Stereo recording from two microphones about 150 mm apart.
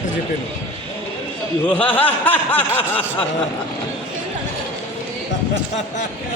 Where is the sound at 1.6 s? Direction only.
10° left (ahead or behind).